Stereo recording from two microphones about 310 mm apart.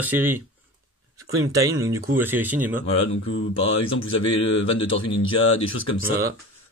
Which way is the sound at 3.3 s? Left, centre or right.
Left.